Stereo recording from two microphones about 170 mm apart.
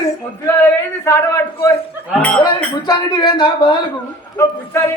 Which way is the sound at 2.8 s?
25° left (ahead or behind).